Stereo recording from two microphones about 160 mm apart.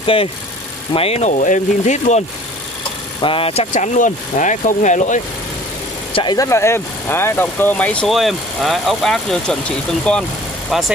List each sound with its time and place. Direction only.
0.0 s speech: 35° left (ahead or behind)
3.2 s speech: 35° left (ahead or behind); by 5.2 s 50° left (ahead or behind)
6.1 s speech: 25° left (ahead or behind); by 10.9 s centre (ahead or behind)